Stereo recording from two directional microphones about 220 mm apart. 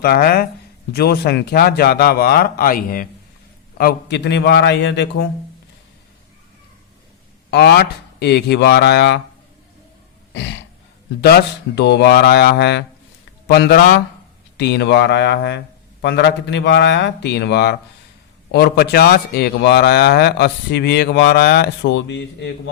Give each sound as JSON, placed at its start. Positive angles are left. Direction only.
{"t": 0.0, "sound": "a man's voice", "side_deg": 45}
{"t": 7.5, "sound": "a man's voice", "side_deg": 50}
{"t": 10.3, "sound": "a sound", "side_deg": 55}
{"t": 11.2, "sound": "a man's voice", "side_deg": 50}